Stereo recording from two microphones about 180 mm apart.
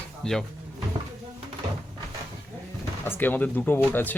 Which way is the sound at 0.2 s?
5° left (ahead or behind).